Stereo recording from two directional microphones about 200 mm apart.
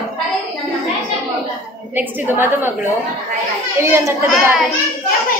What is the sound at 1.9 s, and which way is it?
Speech, 10° right (ahead or behind).